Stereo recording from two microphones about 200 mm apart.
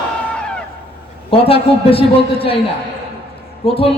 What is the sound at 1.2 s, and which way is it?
A man's voice, 30° left (ahead or behind).